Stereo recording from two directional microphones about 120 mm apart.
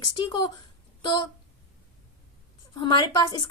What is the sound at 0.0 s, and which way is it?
Speech, 35° left (ahead or behind).